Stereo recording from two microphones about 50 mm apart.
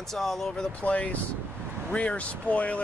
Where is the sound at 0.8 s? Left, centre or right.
Left.